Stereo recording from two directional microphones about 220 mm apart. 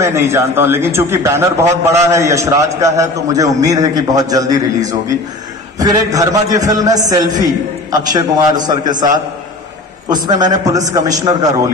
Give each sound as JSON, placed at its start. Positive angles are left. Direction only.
{"t": 0.0, "sound": "a man's voice", "side_deg": -10}
{"t": 10.2, "sound": "a man's voice", "side_deg": -15}